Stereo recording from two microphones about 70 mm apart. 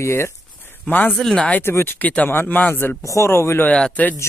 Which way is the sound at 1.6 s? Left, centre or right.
Left.